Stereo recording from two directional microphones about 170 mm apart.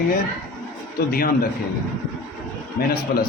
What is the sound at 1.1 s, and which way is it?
Speech, 60° left (ahead or behind).